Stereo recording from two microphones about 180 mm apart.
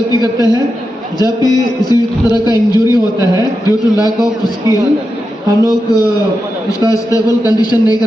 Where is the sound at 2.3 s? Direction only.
20° left (ahead or behind).